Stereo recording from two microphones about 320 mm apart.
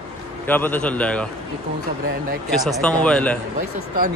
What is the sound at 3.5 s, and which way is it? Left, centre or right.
Speech, right.